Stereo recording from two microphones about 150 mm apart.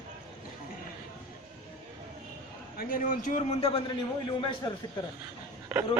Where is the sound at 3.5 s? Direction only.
40° left (ahead or behind).